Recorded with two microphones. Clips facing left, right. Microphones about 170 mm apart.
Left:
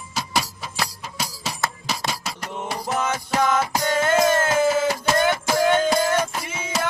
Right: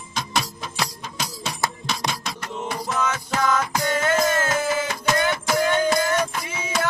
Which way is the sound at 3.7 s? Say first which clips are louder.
Left 1 dB; 30° left (ahead or behind).